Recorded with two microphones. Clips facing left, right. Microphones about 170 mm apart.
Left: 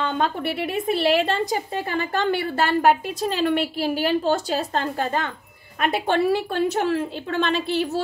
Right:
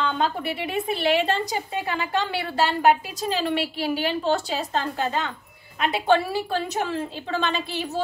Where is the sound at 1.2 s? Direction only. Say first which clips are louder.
Left 2 dB; 50° left (ahead or behind).